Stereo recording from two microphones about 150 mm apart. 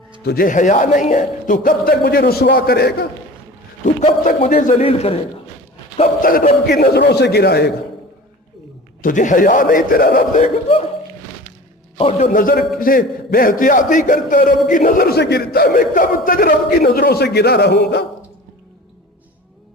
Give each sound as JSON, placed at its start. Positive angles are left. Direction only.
{"t": 0.2, "sound": "speech", "side_deg": 85}
{"t": 3.8, "sound": "a man's voice", "side_deg": 55}
{"t": 4.8, "sound": "a man's voice", "side_deg": 45}
{"t": 6.2, "sound": "a man's voice", "side_deg": 70}
{"t": 6.7, "sound": "speech", "side_deg": 90}
{"t": 9.0, "sound": "a man's voice", "side_deg": 60}
{"t": 10.4, "sound": "speech", "side_deg": 40}
{"t": 12.2, "sound": "a man's voice", "side_deg": 65}